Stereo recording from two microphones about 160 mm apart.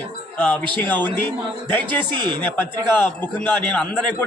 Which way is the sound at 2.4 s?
10° left (ahead or behind).